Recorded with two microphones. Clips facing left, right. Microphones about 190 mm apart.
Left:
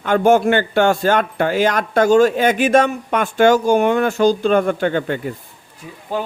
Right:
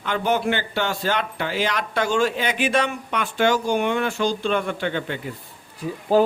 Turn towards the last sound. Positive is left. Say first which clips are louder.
# right 7 dB
turn(degrees=-40)  # may be behind; listen again after turning